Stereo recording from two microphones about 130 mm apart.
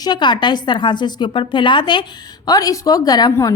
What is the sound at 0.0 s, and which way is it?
Speech, 35° left (ahead or behind).